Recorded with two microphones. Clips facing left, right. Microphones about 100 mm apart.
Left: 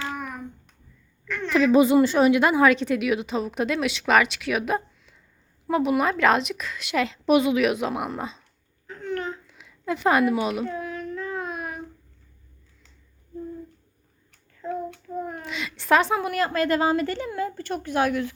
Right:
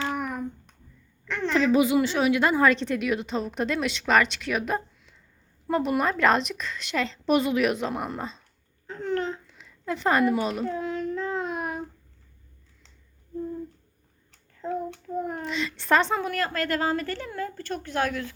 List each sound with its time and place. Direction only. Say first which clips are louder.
0.0 s hands: right 3 dB; 25° right (ahead or behind)
1.3 s a sound: right 2 dB; 30° right (ahead or behind)
1.5 s a woman's voice: left 4 dB; 15° left (ahead or behind)
1.8 s a woman's voice: left 5 dB; 35° left (ahead or behind)
2.3 s a woman's voice: left 3 dB; 15° left (ahead or behind)
8.9 s babbling: right 2 dB; 30° right (ahead or behind)
9.5 s speech: left 3 dB; 5° left (ahead or behind)
10.7 s child singing: right 2 dB; 30° right (ahead or behind)
14.6 s child singing: even; 25° right (ahead or behind)
15.4 s a woman's voice: left 3 dB; 5° left (ahead or behind)